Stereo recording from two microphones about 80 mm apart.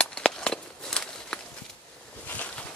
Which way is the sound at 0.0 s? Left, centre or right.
Centre.